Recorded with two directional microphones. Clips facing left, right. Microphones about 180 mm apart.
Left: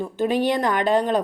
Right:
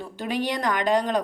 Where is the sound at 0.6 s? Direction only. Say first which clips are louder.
Left 3 dB; 15° right (ahead or behind).